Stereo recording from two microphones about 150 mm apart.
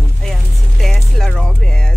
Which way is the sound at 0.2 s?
Centre (ahead or behind).